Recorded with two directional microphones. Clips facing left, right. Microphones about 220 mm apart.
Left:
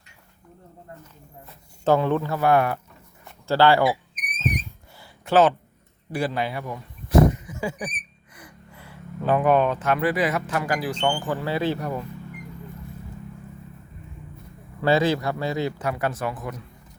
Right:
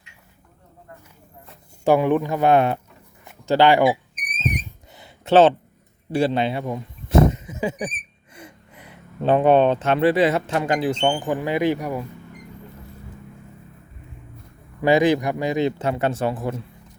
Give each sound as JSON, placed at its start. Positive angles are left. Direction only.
{"t": 1.8, "sound": "speech", "side_deg": -15}
{"t": 4.9, "sound": "a sound", "side_deg": -25}
{"t": 6.1, "sound": "speech", "side_deg": -25}
{"t": 14.8, "sound": "speech", "side_deg": -15}